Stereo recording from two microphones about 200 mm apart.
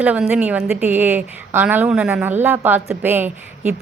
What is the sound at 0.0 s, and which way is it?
A woman's voice, 5° right (ahead or behind).